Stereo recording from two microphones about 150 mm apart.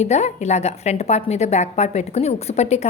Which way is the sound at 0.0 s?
50° left (ahead or behind).